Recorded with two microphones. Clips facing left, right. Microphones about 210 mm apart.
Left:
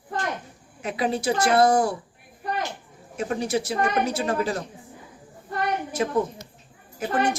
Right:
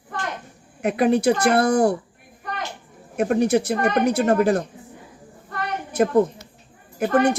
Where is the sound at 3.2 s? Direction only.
60° right (ahead or behind).